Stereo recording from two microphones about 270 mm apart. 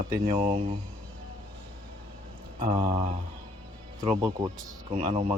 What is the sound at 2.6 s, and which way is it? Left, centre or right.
Speech, centre.